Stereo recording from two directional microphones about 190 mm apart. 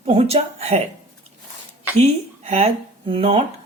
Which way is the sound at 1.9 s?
35° right (ahead or behind).